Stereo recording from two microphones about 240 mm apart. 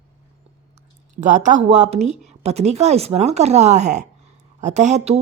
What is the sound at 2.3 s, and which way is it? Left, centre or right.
A woman's voice, right.